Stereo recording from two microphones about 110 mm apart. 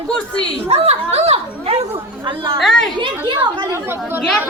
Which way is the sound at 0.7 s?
70° right (ahead or behind).